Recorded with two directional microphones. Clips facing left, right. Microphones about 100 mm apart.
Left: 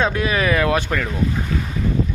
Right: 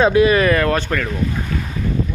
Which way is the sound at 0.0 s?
5° right (ahead or behind).